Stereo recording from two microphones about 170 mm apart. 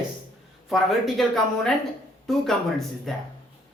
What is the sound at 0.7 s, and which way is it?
Speech, centre (ahead or behind).